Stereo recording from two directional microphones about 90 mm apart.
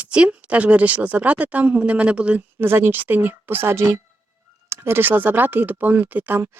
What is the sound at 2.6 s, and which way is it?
Speech, 25° right (ahead or behind).